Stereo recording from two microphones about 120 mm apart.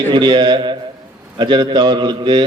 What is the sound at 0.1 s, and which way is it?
A man's voice, 40° right (ahead or behind).